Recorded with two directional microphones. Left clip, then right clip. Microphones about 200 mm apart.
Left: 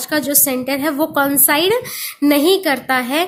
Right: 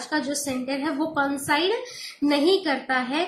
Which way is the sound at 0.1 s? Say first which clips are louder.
Left 9 dB; 50° left (ahead or behind).